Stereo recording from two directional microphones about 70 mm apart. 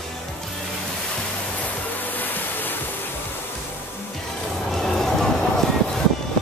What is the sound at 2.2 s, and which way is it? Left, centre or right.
Music, left.